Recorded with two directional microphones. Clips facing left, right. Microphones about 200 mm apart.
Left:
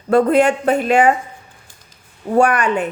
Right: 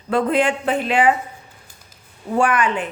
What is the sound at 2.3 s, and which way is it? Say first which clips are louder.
Speech: left 4 dB; 40° left (ahead or behind).